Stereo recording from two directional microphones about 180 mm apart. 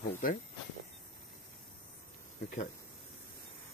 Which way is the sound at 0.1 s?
45° left (ahead or behind).